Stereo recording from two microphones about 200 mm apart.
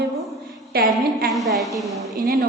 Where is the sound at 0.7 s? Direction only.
50° right (ahead or behind).